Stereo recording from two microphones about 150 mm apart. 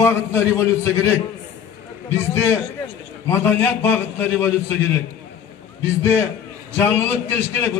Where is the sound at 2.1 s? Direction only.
20° left (ahead or behind).